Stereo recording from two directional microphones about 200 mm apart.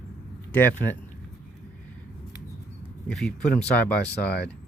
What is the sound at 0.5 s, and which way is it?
Speech, 10° left (ahead or behind).